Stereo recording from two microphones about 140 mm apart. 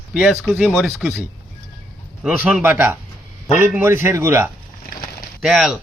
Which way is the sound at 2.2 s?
10° right (ahead or behind).